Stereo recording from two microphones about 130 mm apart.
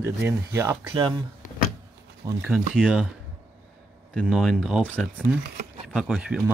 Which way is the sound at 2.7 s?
5° right (ahead or behind).